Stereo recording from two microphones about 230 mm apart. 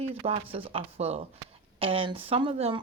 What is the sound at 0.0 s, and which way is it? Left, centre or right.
Speech, right.